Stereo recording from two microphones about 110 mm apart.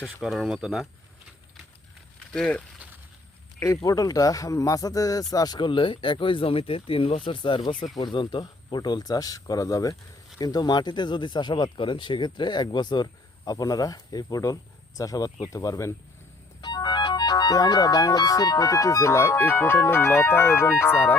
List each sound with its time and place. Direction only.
0.2 s speech: centre (ahead or behind)
2.3 s speech: 5° left (ahead or behind)
2.7 s a sound: 15° right (ahead or behind)
3.8 s speech: 35° left (ahead or behind)
16.6 s speech: 45° left (ahead or behind); by 21.2 s 20° left (ahead or behind)